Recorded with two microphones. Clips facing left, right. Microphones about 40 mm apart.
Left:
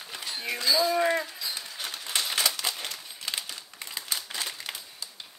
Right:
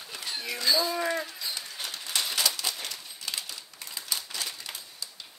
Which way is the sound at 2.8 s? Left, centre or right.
Left.